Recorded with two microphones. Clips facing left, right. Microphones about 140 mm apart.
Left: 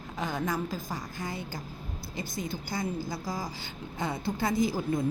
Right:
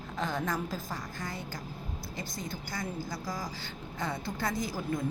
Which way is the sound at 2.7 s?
25° left (ahead or behind).